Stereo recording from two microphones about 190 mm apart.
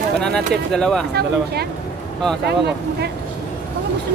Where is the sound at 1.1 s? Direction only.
60° right (ahead or behind).